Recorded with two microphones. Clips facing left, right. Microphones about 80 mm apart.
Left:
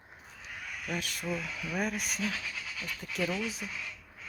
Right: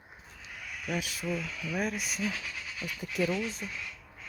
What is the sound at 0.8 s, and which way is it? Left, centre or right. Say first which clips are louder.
Speech: right 2 dB; centre.